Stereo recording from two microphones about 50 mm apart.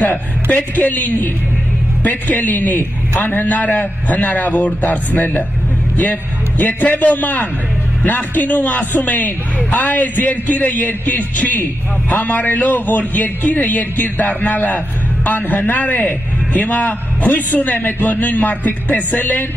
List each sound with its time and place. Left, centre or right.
0.0 s a man's voice: left
6.6 s a man's voice: left